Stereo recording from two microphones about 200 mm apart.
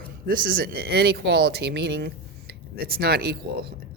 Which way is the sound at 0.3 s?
45° right (ahead or behind).